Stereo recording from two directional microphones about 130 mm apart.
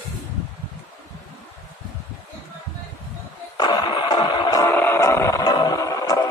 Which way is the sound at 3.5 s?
35° left (ahead or behind).